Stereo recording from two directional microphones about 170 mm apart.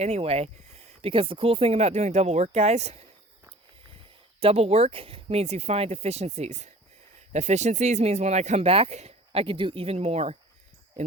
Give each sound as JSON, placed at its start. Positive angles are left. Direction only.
{"t": 0.0, "sound": "speech", "side_deg": -35}
{"t": 4.4, "sound": "speech", "side_deg": -35}